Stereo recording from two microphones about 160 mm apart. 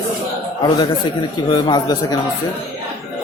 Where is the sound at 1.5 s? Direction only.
25° left (ahead or behind).